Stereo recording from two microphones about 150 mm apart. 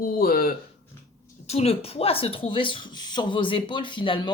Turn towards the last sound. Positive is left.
turn(degrees=35)  # may be behind; listen again after turning